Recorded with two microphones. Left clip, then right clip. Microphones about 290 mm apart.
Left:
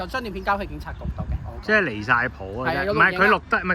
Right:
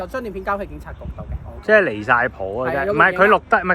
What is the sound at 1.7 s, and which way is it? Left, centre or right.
Speech, centre.